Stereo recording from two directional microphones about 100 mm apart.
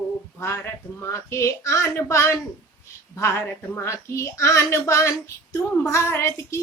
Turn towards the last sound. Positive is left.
turn(degrees=25)  # may be behind; listen again after turning